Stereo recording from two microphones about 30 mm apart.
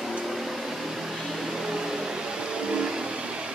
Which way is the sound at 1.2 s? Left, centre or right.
Centre.